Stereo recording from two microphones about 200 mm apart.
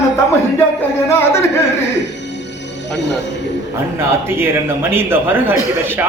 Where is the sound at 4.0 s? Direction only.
10° right (ahead or behind).